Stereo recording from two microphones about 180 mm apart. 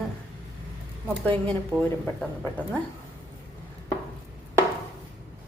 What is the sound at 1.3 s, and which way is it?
Speech, 5° left (ahead or behind).